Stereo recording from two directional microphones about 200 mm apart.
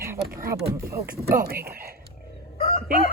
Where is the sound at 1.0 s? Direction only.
50° right (ahead or behind).